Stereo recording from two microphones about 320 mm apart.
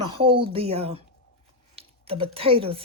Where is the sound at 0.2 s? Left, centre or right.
Centre.